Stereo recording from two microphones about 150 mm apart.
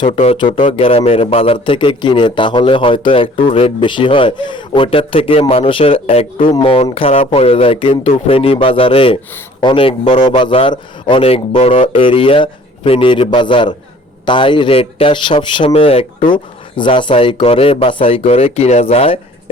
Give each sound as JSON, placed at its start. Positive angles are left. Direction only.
{"t": 0.1, "sound": "a man's voice", "side_deg": 40}